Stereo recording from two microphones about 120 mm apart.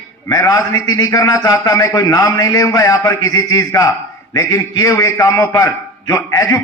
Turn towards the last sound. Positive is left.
turn(degrees=25)  # may be behind; listen again after turning